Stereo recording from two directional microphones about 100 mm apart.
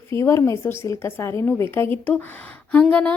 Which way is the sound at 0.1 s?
30° left (ahead or behind).